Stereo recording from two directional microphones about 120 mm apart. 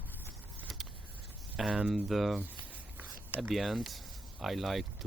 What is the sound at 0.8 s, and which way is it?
Vehicle, centre (ahead or behind).